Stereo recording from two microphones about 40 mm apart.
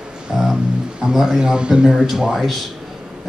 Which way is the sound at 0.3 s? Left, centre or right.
Centre.